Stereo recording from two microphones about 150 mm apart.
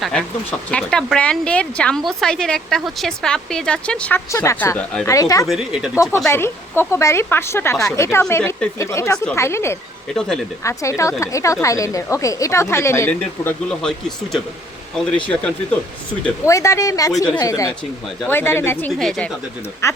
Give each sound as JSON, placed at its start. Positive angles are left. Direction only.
{"t": 0.0, "sound": "a woman's voice", "side_deg": 5}
{"t": 4.3, "sound": "speech", "side_deg": 20}
{"t": 5.5, "sound": "a woman's voice", "side_deg": -5}
{"t": 6.0, "sound": "speech", "side_deg": 20}
{"t": 10.2, "sound": "a woman's voice", "side_deg": 5}
{"t": 10.6, "sound": "speech", "side_deg": 20}
{"t": 16.5, "sound": "speech", "side_deg": 20}
{"t": 18.9, "sound": "a woman's voice", "side_deg": 5}
{"t": 19.8, "sound": "speech", "side_deg": 20}